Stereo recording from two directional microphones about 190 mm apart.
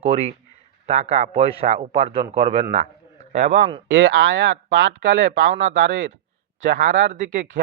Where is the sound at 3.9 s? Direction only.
85° right.